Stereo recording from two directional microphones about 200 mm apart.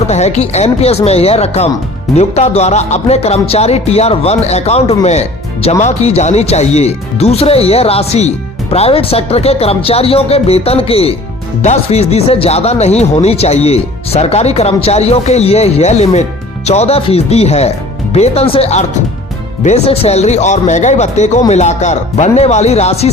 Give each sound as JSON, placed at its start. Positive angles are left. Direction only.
{"t": 0.1, "sound": "speech", "side_deg": 35}